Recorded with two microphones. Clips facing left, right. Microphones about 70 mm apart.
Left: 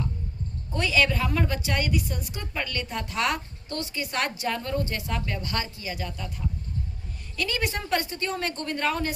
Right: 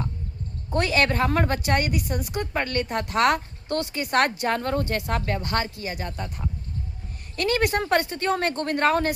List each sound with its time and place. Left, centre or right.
0.7 s a woman's voice: right